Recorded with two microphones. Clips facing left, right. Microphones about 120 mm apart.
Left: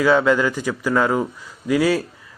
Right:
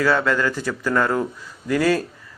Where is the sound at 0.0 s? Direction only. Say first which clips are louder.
Left 3 dB; 15° left (ahead or behind).